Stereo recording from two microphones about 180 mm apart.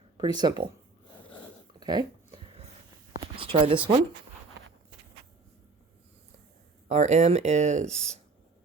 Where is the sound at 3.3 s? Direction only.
30° right (ahead or behind).